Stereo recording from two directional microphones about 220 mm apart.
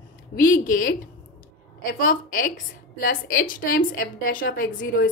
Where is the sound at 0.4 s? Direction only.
40° left (ahead or behind).